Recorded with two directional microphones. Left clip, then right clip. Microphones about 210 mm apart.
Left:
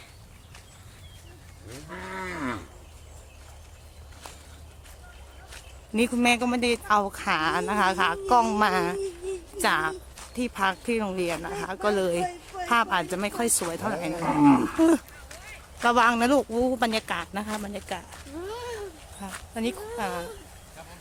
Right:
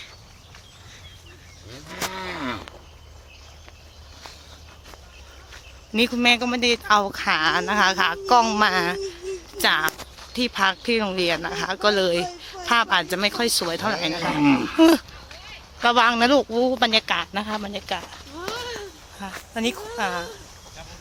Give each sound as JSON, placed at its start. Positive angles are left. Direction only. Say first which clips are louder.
{"t": 2.1, "sound": "cattle", "louder": "right 3 dB", "side_deg": -15}
{"t": 5.9, "sound": "speech", "louder": "right 4 dB", "side_deg": 5}
{"t": 14.2, "sound": "speech", "louder": "left 3 dB", "side_deg": -25}
{"t": 14.8, "sound": "speech", "louder": "right 6 dB", "side_deg": -10}
{"t": 15.8, "sound": "speech", "louder": "right 3 dB", "side_deg": 0}
{"t": 19.2, "sound": "speech", "louder": "right 5 dB", "side_deg": -10}